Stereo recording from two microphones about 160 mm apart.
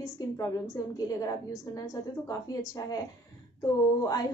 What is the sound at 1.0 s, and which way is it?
Speech, 20° left (ahead or behind).